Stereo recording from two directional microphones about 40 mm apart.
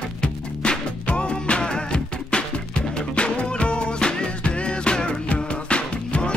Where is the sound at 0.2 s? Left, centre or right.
Left.